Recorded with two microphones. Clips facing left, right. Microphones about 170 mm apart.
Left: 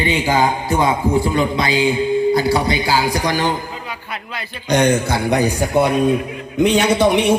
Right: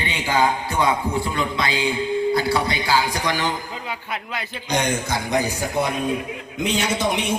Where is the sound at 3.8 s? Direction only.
20° right (ahead or behind).